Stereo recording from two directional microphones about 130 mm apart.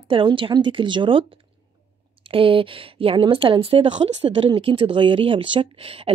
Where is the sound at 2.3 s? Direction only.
45° right (ahead or behind).